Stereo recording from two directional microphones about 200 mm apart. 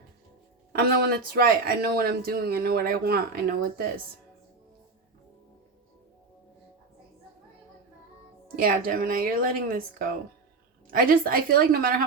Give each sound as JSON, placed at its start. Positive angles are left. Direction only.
{"t": 0.7, "sound": "speech", "side_deg": -50}
{"t": 8.5, "sound": "speech", "side_deg": -45}